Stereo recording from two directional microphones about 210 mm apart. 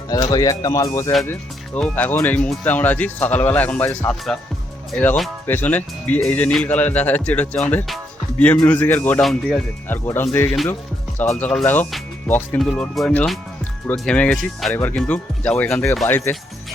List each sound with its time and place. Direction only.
0.1 s speech: 20° left (ahead or behind)